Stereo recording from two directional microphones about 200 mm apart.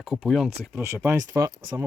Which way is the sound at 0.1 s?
Centre (ahead or behind).